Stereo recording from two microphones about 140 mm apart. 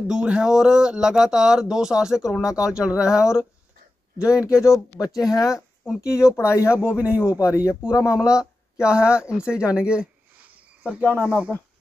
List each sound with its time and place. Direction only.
0.0 s speech: 5° right (ahead or behind)
4.3 s speech: 20° left (ahead or behind)
7.6 s speech: 5° right (ahead or behind)